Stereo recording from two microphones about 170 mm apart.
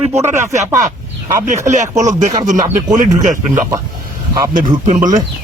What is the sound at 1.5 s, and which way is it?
Speech, 45° right (ahead or behind).